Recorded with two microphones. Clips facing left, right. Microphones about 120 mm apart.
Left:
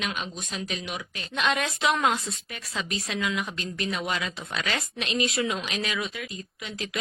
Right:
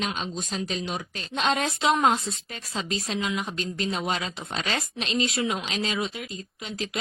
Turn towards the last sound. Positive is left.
turn(degrees=-30)  # may be behind; listen again after turning